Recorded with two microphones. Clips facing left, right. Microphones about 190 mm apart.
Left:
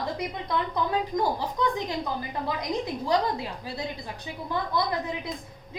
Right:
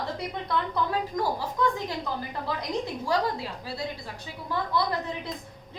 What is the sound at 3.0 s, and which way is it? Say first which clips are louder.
A woman's voice: left 2 dB; 20° left (ahead or behind).